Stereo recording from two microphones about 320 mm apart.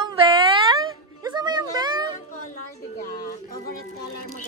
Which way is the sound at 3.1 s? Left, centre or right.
Left.